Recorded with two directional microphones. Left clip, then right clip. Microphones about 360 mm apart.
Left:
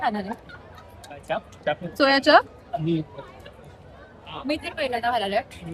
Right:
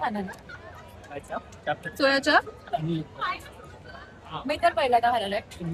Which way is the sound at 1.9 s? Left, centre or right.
Left.